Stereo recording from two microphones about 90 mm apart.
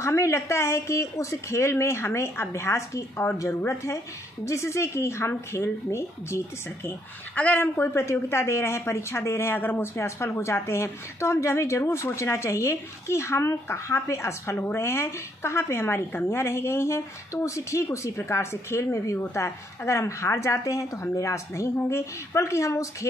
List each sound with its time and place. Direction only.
0.0 s speech: 35° left (ahead or behind)